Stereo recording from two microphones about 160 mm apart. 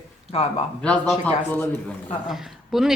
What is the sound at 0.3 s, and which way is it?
Speech, 40° left (ahead or behind).